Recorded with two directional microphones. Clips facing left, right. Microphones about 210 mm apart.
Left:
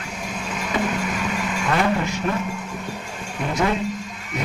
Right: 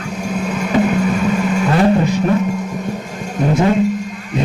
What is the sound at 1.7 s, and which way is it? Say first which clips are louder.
Music: right 7 dB; 30° right (ahead or behind).